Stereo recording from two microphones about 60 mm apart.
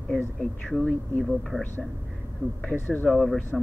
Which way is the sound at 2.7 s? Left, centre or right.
Left.